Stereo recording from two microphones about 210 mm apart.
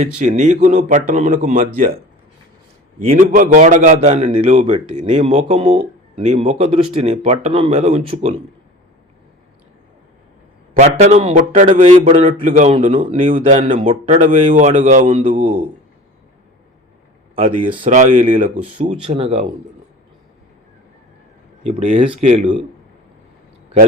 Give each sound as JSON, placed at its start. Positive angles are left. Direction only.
{"t": 0.2, "sound": "a man's voice", "side_deg": -35}
{"t": 3.0, "sound": "a man's voice", "side_deg": -35}
{"t": 10.8, "sound": "a man's voice", "side_deg": -30}
{"t": 12.3, "sound": "a man's voice", "side_deg": -40}
{"t": 13.1, "sound": "a man's voice", "side_deg": -25}
{"t": 15.0, "sound": "speech", "side_deg": -25}
{"t": 15.3, "sound": "a man's voice", "side_deg": -40}
{"t": 17.8, "sound": "a man's voice", "side_deg": -35}
{"t": 18.8, "sound": "speech", "side_deg": -25}
{"t": 21.6, "sound": "speech", "side_deg": -30}